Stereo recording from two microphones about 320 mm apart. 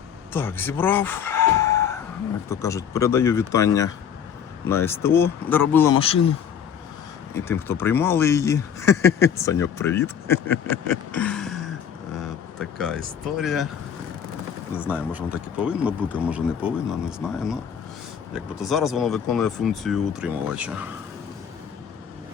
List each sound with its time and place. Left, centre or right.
0.3 s speech: centre
6.0 s speech: centre
7.3 s speech: centre
14.8 s speech: centre